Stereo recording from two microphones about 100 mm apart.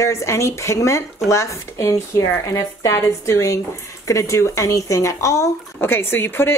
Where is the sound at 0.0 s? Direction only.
30° left (ahead or behind).